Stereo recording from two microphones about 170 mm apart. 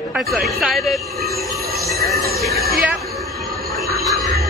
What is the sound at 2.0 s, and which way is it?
Speech, 65° right (ahead or behind).